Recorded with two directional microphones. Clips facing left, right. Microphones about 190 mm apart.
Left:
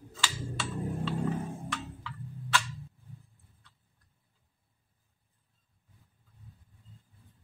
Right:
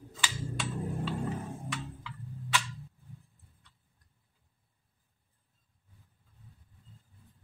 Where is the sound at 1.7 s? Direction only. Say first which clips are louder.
Left 1 dB; 10° right (ahead or behind).